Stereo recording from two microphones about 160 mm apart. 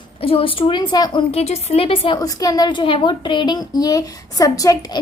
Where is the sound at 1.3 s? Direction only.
40° left (ahead or behind).